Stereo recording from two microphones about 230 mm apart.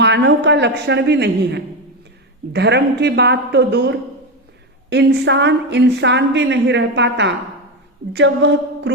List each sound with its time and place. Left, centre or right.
0.0 s a woman's voice: right